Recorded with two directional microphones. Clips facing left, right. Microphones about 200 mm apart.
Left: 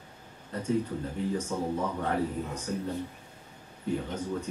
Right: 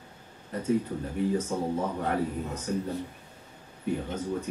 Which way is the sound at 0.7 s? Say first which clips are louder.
Right 2 dB; 10° right (ahead or behind).